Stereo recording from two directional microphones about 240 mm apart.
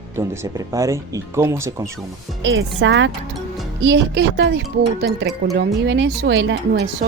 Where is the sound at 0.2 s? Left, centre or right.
Centre.